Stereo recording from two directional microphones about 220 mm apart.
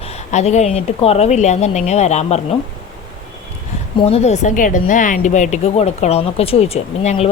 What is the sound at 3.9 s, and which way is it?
Speech, 25° left (ahead or behind).